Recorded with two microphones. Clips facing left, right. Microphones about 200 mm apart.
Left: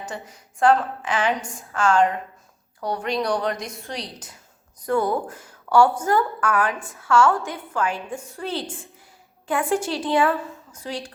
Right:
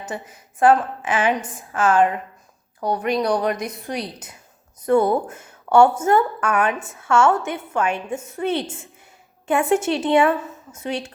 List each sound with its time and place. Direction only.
0.1 s a woman's voice: 20° right (ahead or behind)
3.5 s a woman's voice: 60° right (ahead or behind)
4.8 s a woman's voice: 25° right (ahead or behind)